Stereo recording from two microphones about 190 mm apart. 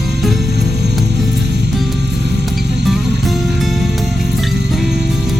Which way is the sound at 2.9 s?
Centre (ahead or behind).